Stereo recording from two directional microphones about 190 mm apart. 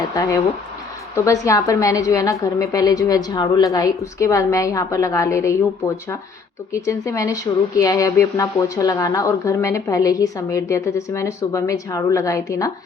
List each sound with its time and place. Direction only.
0.1 s a woman's voice: 20° left (ahead or behind)